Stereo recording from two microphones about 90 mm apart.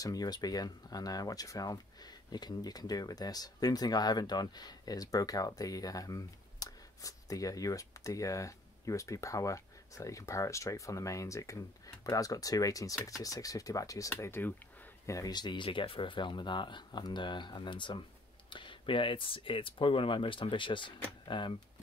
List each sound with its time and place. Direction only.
0.0 s speech: 45° left (ahead or behind)
14.2 s speech: 25° left (ahead or behind)
15.0 s speech: 40° left (ahead or behind); by 21.5 s 60° left (ahead or behind)